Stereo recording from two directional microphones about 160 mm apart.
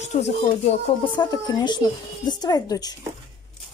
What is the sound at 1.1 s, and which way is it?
Speech, 20° left (ahead or behind).